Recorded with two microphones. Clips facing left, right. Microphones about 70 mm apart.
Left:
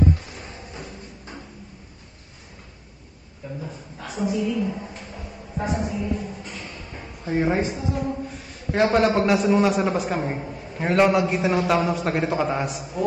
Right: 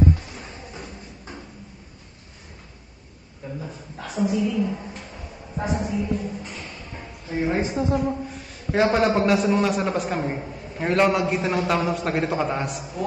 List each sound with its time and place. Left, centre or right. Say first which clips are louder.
0.3 s music: even; centre
3.6 s a man's voice: even; centre
5.8 s a sound: right 1 dB; centre
7.3 s a man's voice: left 2 dB; centre
7.7 s a woman's voice: right 5 dB; right
8.0 s a man's voice: right 2 dB; centre